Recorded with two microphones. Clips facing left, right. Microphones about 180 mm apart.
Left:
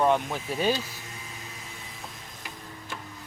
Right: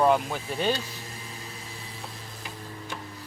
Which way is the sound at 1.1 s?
35° right (ahead or behind).